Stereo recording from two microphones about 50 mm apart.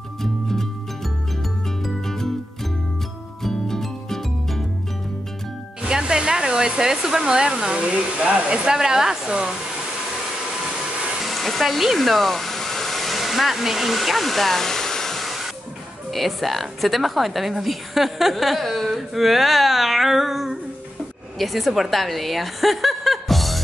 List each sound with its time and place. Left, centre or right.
0.2 s music: centre
5.8 s music: centre
6.8 s speech: centre
11.2 s hair dryer: centre
16.1 s a woman's voice: centre